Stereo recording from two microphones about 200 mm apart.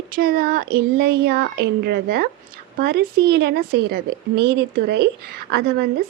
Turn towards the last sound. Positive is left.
turn(degrees=-50)  # may be behind; listen again after turning